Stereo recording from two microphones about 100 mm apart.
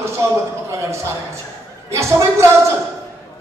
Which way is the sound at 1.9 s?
30° right (ahead or behind).